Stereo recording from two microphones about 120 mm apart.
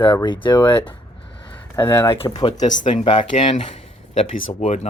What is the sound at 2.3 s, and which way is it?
Speech, 35° left (ahead or behind).